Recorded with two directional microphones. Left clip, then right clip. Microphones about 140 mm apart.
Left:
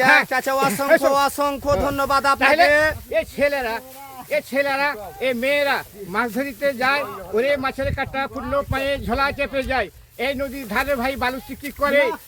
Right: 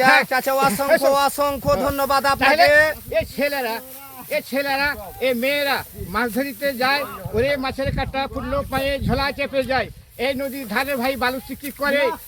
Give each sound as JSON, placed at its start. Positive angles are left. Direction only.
{"t": 0.3, "sound": "speech", "side_deg": -25}
{"t": 2.4, "sound": "speech", "side_deg": 35}
{"t": 2.6, "sound": "speech", "side_deg": -25}
{"t": 3.1, "sound": "speech", "side_deg": 30}